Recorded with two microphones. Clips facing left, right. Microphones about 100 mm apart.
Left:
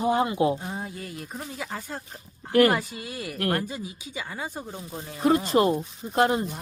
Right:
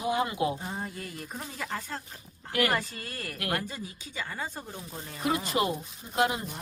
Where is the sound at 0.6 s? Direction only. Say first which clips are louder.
Left 2 dB; 5° left (ahead or behind).